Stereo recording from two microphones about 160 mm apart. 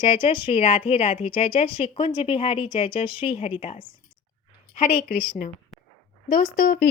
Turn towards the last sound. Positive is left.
turn(degrees=70)  # may be behind; listen again after turning